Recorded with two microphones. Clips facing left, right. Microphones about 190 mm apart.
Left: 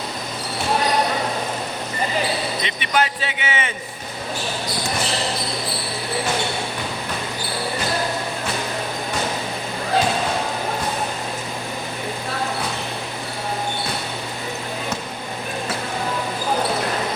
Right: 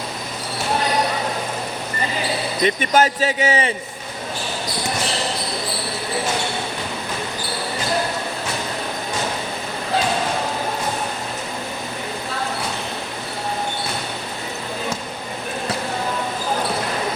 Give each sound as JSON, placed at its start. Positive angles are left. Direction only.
{"t": 2.6, "sound": "a man's voice", "side_deg": -45}